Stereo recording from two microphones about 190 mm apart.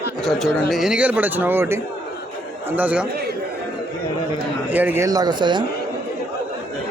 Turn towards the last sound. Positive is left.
turn(degrees=-25)  # may be behind; listen again after turning